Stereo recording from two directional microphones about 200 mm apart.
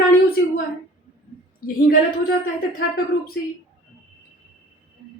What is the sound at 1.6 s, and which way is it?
Speech, 50° left (ahead or behind).